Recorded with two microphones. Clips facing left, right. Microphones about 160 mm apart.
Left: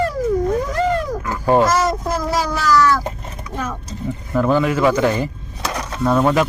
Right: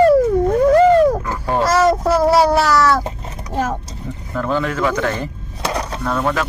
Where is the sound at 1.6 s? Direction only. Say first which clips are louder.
Right 4 dB; 70° right (ahead or behind).